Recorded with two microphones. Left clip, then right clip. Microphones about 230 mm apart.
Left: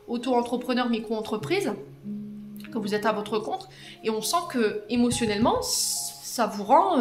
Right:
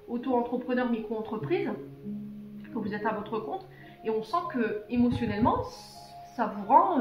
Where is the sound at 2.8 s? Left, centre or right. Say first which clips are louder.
Left 6 dB; left.